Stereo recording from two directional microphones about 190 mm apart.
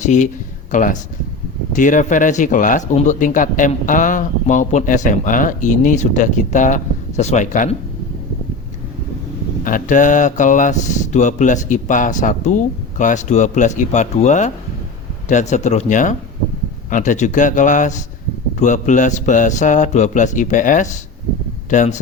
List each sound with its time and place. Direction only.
0.7 s speech: 45° left (ahead or behind)
9.6 s speech: 45° left (ahead or behind)